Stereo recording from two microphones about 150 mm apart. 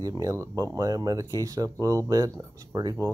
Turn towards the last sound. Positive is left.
turn(degrees=-25)  # may be behind; listen again after turning